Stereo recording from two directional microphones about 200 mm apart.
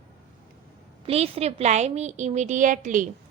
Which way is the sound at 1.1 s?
30° right (ahead or behind).